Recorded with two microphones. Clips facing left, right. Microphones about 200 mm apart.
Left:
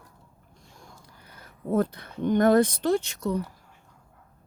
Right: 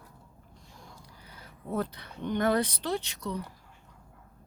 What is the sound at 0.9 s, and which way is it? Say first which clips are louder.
Speech: even; 50° left (ahead or behind).